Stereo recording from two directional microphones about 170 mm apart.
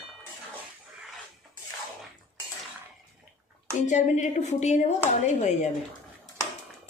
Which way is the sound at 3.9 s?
45° left (ahead or behind).